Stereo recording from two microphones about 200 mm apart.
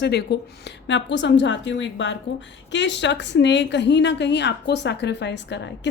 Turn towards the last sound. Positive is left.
turn(degrees=60)  # may be behind; listen again after turning